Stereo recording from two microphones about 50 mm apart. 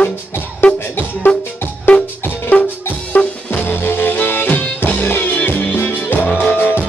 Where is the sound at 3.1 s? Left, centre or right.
Left.